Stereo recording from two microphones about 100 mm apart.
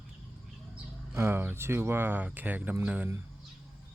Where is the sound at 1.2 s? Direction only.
25° right (ahead or behind).